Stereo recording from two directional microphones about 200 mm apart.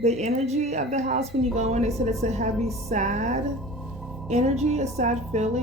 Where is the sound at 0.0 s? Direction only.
35° right (ahead or behind).